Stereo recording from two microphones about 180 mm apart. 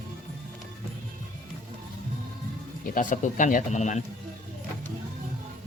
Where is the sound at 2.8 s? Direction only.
45° left (ahead or behind).